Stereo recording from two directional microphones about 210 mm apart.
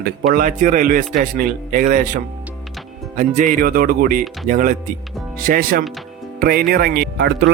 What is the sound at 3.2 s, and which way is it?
Speech, 35° right (ahead or behind).